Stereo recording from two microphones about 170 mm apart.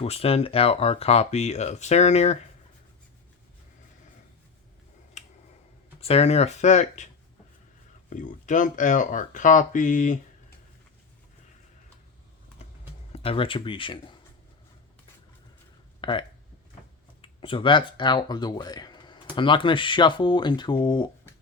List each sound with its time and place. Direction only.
0.0 s speech: 35° left (ahead or behind)
5.2 s finger snapping: 45° left (ahead or behind)
6.0 s speech: 35° left (ahead or behind)
8.1 s speech: 50° left (ahead or behind)
13.1 s speech: 35° left (ahead or behind)
16.0 s a sound: 30° left (ahead or behind)
17.2 s speech: 30° left (ahead or behind)